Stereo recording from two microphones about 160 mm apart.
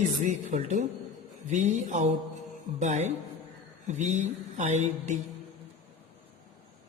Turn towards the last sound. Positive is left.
turn(degrees=-45)  # may be behind; listen again after turning